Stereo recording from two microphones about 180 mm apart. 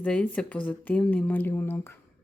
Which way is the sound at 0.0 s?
5° left (ahead or behind).